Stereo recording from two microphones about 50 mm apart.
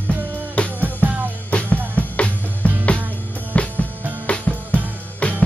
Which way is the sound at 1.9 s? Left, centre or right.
Left.